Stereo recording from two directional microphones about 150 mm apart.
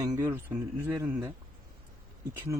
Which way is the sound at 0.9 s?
15° right (ahead or behind).